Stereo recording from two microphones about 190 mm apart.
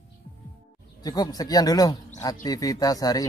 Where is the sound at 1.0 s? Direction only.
20° left (ahead or behind).